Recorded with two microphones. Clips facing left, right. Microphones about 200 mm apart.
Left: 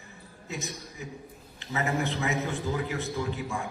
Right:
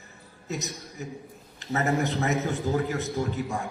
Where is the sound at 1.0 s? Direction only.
40° right (ahead or behind).